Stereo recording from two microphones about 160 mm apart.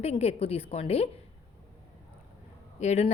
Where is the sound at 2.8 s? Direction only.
45° left (ahead or behind).